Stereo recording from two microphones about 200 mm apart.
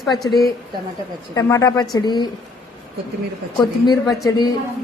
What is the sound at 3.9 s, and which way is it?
Speech, 20° left (ahead or behind).